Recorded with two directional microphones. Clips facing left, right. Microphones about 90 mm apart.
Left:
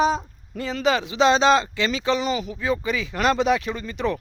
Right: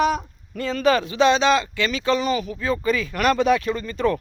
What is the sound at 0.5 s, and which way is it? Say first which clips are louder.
A man's voice: right 3 dB; 15° left (ahead or behind).